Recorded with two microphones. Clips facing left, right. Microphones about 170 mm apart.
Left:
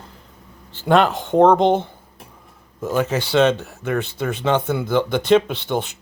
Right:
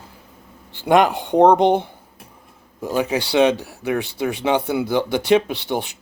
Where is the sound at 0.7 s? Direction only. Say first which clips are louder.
Right 1 dB; 15° right (ahead or behind).